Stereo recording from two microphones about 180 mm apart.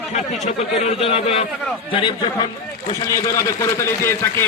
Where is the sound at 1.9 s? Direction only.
25° left (ahead or behind).